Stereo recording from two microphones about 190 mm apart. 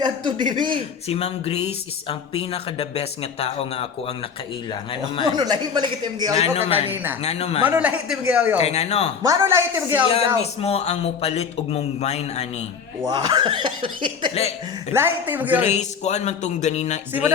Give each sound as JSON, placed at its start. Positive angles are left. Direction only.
{"t": 0.0, "sound": "speech", "side_deg": -25}
{"t": 1.0, "sound": "speech", "side_deg": 30}
{"t": 5.3, "sound": "speech", "side_deg": -20}
{"t": 6.3, "sound": "speech", "side_deg": 30}
{"t": 6.9, "sound": "speech", "side_deg": -10}
{"t": 7.2, "sound": "speech", "side_deg": 35}
{"t": 7.7, "sound": "speech", "side_deg": -5}
{"t": 8.5, "sound": "speech", "side_deg": 35}
{"t": 9.2, "sound": "speech", "side_deg": -15}
{"t": 10.2, "sound": "speech", "side_deg": 35}
{"t": 13.1, "sound": "speech", "side_deg": -20}
{"t": 14.9, "sound": "speech", "side_deg": -10}
{"t": 15.6, "sound": "speech", "side_deg": 35}